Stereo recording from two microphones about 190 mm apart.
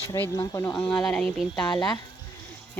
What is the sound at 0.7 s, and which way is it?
Speech, 5° left (ahead or behind).